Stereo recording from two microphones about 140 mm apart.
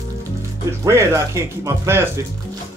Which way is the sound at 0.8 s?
20° right (ahead or behind).